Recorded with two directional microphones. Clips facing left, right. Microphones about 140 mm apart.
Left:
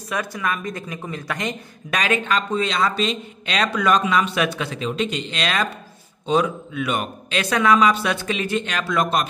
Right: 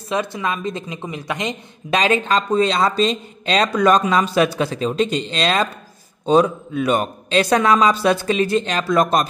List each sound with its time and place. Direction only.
0.1 s speech: 25° right (ahead or behind)